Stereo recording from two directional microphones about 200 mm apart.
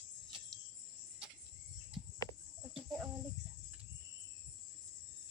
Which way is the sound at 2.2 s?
15° left (ahead or behind).